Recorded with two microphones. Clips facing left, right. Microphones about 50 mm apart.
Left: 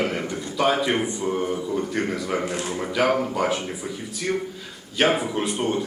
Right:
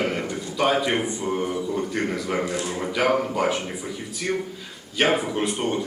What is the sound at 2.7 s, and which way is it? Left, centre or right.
A man's voice, centre.